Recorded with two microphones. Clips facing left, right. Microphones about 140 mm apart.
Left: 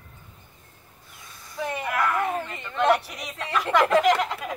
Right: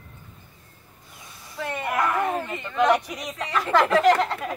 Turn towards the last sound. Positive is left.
turn(degrees=0)  # may be behind; listen again after turning